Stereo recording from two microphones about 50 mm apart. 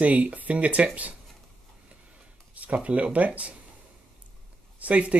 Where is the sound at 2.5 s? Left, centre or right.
Right.